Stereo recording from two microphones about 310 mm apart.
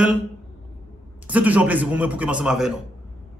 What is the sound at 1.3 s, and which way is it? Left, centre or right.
A man's voice, centre.